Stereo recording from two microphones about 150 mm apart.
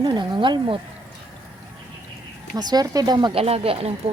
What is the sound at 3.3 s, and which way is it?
Speech, 40° right (ahead or behind).